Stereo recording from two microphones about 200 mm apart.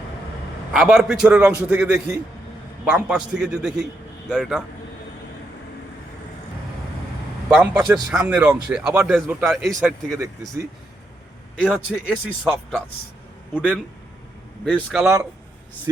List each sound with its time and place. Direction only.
0.7 s speech: centre (ahead or behind)
7.5 s speech: 5° right (ahead or behind)
11.6 s speech: 5° right (ahead or behind)
15.0 s speech: 15° right (ahead or behind)